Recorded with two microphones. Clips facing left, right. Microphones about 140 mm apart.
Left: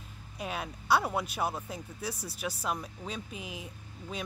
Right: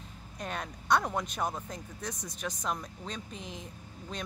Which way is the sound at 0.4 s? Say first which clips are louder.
Left 1 dB; 5° left (ahead or behind).